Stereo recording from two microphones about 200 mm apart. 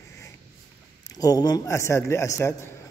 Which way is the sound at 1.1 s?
20° left (ahead or behind).